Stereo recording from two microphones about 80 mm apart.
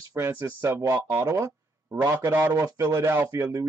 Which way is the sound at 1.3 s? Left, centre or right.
Right.